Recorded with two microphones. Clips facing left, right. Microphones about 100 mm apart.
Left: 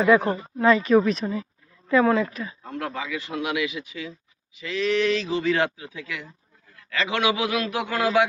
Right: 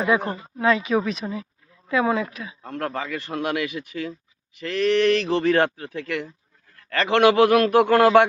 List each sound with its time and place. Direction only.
0.0 s speech: 15° right (ahead or behind)
0.5 s speech: centre (ahead or behind)
2.6 s a man's voice: 50° right (ahead or behind)